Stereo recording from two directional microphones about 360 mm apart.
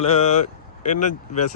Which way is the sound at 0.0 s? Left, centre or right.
Centre.